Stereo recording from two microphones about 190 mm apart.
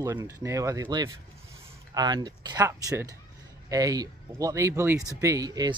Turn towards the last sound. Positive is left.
turn(degrees=-20)  # may be behind; listen again after turning